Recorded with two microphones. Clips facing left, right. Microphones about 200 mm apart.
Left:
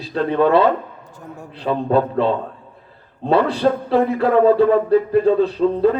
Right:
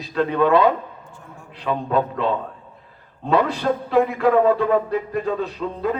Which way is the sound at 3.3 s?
30° left (ahead or behind).